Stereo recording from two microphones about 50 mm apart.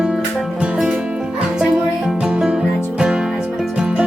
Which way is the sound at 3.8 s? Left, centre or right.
Centre.